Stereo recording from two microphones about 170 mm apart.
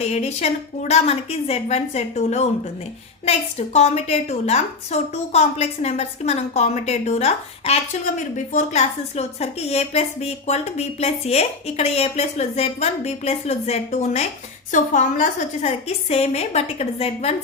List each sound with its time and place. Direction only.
0.0 s a woman's voice: 40° left (ahead or behind)